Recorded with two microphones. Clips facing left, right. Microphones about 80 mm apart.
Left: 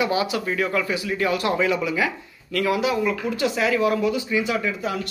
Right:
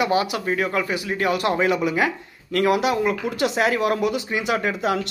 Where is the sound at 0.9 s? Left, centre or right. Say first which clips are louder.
Right 1 dB; right.